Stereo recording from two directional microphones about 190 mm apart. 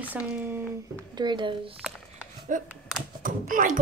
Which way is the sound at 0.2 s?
5° right (ahead or behind).